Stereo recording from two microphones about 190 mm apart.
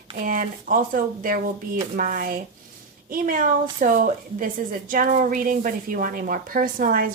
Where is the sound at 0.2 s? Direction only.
45° right (ahead or behind).